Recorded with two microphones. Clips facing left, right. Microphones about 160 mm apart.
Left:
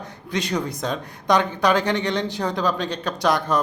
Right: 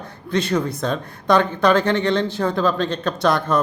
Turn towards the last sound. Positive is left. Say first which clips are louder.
# right 2 dB
turn(degrees=15)  # may be behind; listen again after turning